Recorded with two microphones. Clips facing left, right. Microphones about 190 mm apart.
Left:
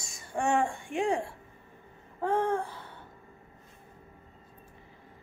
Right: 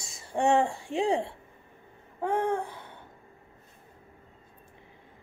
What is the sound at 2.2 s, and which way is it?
Speech, 15° right (ahead or behind).